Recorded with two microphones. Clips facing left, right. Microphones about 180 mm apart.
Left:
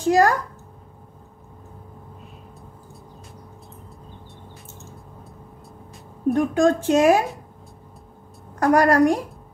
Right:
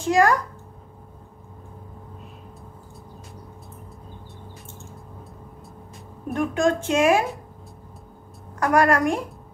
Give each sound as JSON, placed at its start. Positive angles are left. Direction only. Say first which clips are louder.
{"t": 0.0, "sound": "a child's voice", "louder": "left 2 dB", "side_deg": 35}
{"t": 6.3, "sound": "a woman's voice", "louder": "left 2 dB", "side_deg": 35}
{"t": 8.5, "sound": "a woman's voice", "louder": "left 3 dB", "side_deg": 35}